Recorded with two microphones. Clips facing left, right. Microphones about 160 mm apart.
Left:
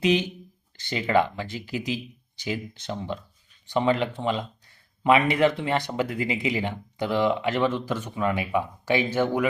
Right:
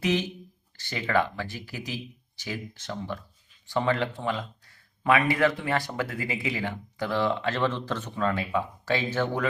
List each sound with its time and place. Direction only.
0.0 s speech: 20° left (ahead or behind)